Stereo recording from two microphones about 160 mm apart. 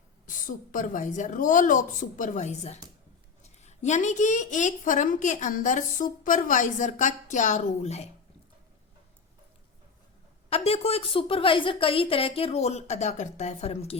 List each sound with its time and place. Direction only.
0.3 s a woman's voice: 55° left (ahead or behind)
10.5 s a woman's voice: 40° left (ahead or behind)